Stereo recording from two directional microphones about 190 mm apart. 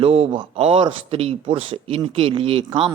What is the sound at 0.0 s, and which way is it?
Speech, 30° right (ahead or behind).